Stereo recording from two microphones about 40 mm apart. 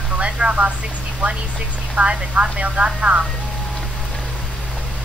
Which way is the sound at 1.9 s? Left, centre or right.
Right.